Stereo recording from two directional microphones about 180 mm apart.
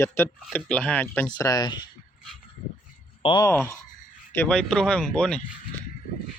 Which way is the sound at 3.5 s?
15° left (ahead or behind).